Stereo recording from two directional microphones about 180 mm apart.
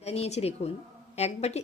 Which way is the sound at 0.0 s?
35° left (ahead or behind).